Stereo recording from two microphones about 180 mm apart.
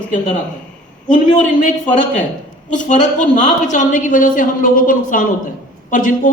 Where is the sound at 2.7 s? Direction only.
45° left (ahead or behind).